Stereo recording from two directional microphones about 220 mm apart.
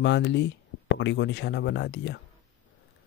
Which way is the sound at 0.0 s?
55° left (ahead or behind).